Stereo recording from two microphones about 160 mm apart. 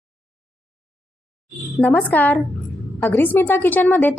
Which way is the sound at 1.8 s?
10° left (ahead or behind).